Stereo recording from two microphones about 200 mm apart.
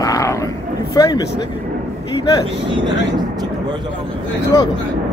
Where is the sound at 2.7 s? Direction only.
20° right (ahead or behind).